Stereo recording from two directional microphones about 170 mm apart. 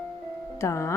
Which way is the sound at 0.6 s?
15° left (ahead or behind).